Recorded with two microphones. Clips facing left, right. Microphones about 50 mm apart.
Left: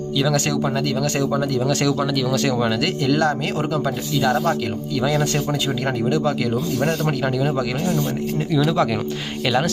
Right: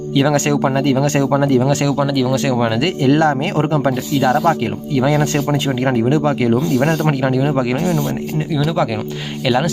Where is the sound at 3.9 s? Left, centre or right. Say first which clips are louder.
Right 4 dB; right.